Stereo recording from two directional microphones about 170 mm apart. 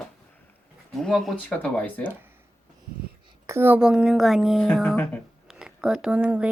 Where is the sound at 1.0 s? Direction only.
Centre (ahead or behind).